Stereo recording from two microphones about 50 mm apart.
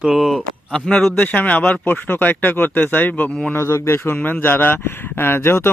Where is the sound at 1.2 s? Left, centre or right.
Left.